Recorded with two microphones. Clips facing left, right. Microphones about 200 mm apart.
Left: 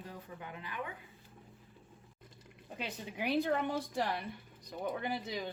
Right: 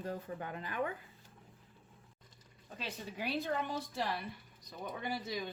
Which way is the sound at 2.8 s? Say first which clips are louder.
Left 2 dB; 15° left (ahead or behind).